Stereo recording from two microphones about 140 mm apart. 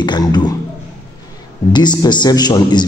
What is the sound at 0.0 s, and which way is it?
Speech, 30° left (ahead or behind).